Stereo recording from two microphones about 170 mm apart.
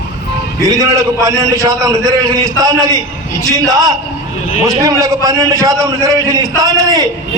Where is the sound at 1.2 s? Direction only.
20° right (ahead or behind).